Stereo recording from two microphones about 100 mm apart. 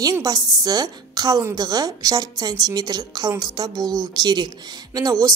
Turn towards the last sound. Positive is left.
turn(degrees=-35)  # may be behind; listen again after turning